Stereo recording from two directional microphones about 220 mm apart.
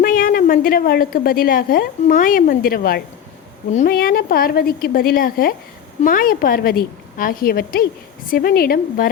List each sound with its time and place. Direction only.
0.0 s a woman's voice: 40° left (ahead or behind)